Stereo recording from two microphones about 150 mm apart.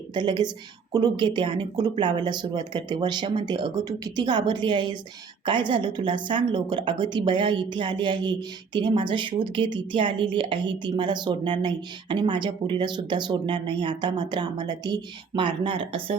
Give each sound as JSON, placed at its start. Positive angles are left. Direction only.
{"t": 0.1, "sound": "a woman's voice", "side_deg": -30}